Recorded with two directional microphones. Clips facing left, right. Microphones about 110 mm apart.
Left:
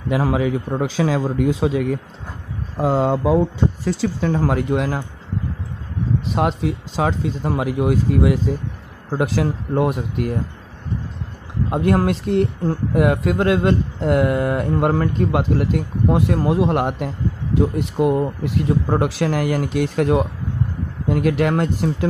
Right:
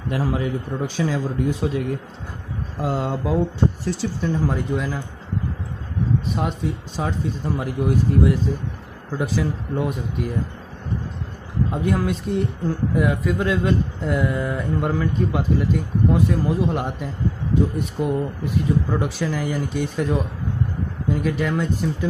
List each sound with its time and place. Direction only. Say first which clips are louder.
0.2 s speech: left 4 dB; 90° left
4.2 s speech: left 2 dB; 90° left; by 5.0 s 75° left (ahead or behind)
6.2 s speech: left 4 dB; 90° left
9.2 s speech: left 3 dB; 75° left (ahead or behind)
11.7 s speech: left 6 dB; 65° left (ahead or behind)
12.6 s speech: left 3 dB; 65° left (ahead or behind); by 20.2 s 85° left
21.1 s speech: left 5 dB; 75° left (ahead or behind)